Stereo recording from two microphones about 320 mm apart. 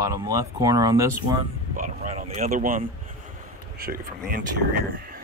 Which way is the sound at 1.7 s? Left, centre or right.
Right.